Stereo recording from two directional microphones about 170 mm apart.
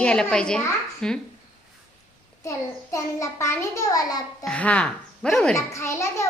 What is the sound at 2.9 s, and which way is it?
A woman's voice, 15° left (ahead or behind).